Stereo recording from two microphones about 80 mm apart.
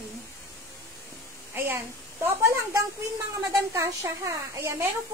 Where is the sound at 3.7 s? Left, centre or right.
Right.